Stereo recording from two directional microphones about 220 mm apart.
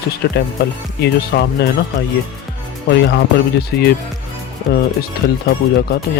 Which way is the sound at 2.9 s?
50° left (ahead or behind).